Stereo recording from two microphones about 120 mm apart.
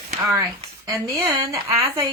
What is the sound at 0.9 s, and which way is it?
Speech, 25° right (ahead or behind).